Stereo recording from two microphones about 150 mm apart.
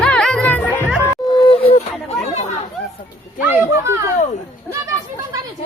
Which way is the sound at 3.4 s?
20° right (ahead or behind).